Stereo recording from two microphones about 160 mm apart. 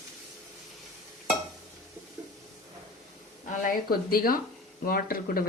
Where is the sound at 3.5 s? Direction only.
60° left (ahead or behind).